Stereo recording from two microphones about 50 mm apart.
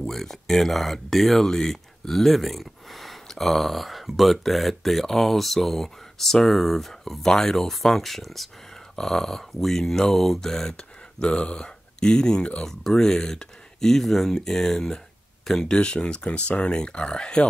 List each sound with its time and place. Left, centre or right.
0.0 s speech: centre